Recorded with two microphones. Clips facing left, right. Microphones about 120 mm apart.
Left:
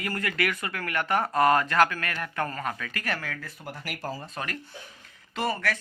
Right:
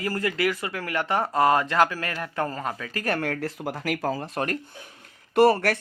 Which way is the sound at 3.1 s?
60° right (ahead or behind).